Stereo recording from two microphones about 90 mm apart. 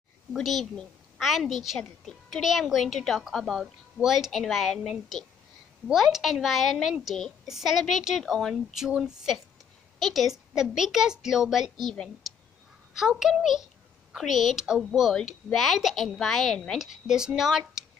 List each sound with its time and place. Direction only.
0.3 s a woman's voice: centre (ahead or behind)
12.2 s clicking: centre (ahead or behind)
12.9 s a woman's voice: 5° right (ahead or behind)
16.7 s a woman's voice: 5° right (ahead or behind)